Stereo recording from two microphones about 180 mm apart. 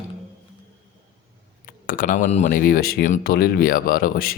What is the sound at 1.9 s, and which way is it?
Speech, 50° left (ahead or behind).